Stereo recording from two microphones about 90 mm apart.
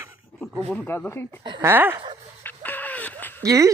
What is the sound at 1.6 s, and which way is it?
Speech, 25° right (ahead or behind).